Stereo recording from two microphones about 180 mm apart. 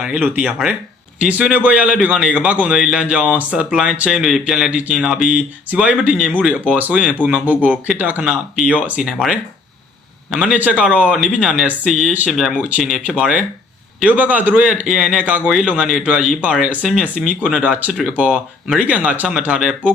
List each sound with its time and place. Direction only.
0.0 s speech: 5° right (ahead or behind)